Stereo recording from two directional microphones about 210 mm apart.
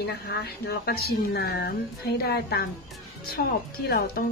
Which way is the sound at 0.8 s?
45° left (ahead or behind).